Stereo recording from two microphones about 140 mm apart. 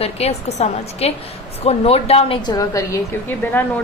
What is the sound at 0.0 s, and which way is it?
A woman's voice, 50° left (ahead or behind).